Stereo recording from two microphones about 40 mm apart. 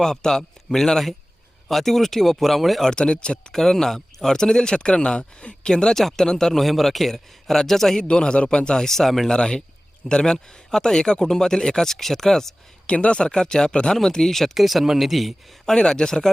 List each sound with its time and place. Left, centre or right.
0.0 s speech: centre
2.8 s a man's voice: left
3.5 s speech: centre
6.6 s speech: centre
8.0 s a man's voice: left; by 9.3 s centre
9.3 s a man's voice: left
12.9 s a man's voice: left; by 14.5 s centre
14.5 s speech: centre
15.6 s speech: centre